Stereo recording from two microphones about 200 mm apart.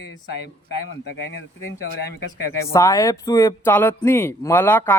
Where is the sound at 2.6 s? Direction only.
15° left (ahead or behind).